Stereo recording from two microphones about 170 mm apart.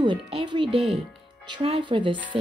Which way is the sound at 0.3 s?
30° right (ahead or behind).